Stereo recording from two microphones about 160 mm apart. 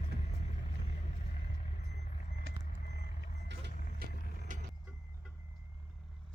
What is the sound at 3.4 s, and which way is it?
Vehicle, 90° right.